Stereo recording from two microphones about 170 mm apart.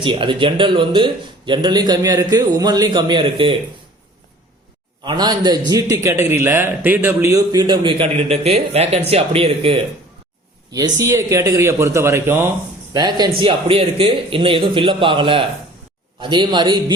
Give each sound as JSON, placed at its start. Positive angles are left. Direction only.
{"t": 0.0, "sound": "a man's voice", "side_deg": -30}
{"t": 5.0, "sound": "a man's voice", "side_deg": -25}
{"t": 10.7, "sound": "a man's voice", "side_deg": -20}
{"t": 12.9, "sound": "a man's voice", "side_deg": -25}